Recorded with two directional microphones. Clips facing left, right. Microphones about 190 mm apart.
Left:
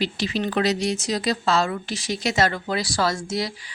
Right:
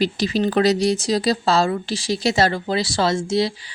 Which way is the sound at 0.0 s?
40° right (ahead or behind).